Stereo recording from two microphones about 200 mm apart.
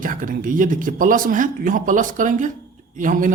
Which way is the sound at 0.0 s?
45° right (ahead or behind).